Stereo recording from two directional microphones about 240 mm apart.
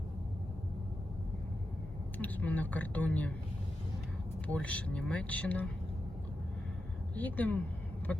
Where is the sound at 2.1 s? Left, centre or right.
Centre.